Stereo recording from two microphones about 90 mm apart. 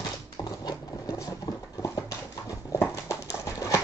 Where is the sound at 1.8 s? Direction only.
40° left (ahead or behind).